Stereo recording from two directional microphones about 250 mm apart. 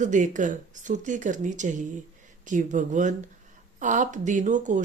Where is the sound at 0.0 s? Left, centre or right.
Right.